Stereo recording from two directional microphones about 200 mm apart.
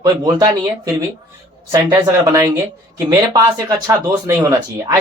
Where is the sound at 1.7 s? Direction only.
20° right (ahead or behind).